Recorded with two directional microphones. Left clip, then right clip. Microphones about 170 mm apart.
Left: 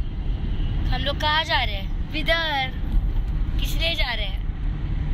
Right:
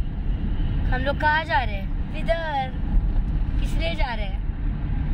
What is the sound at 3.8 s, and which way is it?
Speech, 50° right (ahead or behind).